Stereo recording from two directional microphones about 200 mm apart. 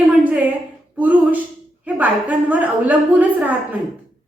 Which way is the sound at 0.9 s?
10° right (ahead or behind).